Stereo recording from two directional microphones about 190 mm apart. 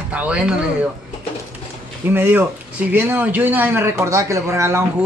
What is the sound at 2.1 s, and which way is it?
A man's voice, 10° right (ahead or behind).